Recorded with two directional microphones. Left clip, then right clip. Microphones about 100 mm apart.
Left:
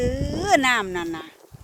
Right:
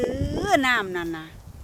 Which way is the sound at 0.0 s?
Centre (ahead or behind).